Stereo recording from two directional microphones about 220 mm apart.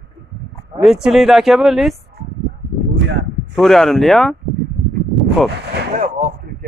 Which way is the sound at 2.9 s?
50° right (ahead or behind).